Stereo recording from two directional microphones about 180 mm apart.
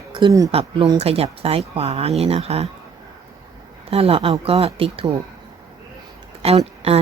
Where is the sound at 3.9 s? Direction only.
35° right (ahead or behind).